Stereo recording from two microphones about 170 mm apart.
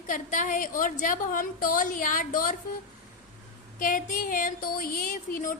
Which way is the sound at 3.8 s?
50° left (ahead or behind).